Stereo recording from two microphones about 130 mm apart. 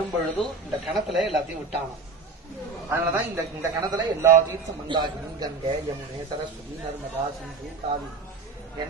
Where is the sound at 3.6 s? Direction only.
30° right (ahead or behind).